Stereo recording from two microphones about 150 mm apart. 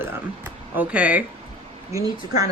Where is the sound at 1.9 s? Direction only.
20° right (ahead or behind).